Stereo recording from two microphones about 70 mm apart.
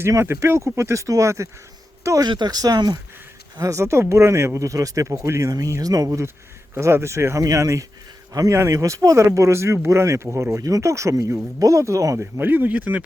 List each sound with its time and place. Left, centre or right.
0.1 s speech: right
2.2 s speech: right
3.6 s speech: right
6.7 s a man's voice: right
10.6 s speech: right
12.4 s speech: right